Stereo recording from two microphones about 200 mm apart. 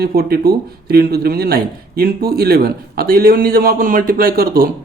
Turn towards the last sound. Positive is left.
turn(degrees=-45)  # may be behind; listen again after turning